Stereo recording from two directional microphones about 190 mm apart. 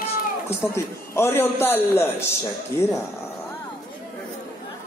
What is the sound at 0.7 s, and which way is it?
A man's voice, 15° left (ahead or behind).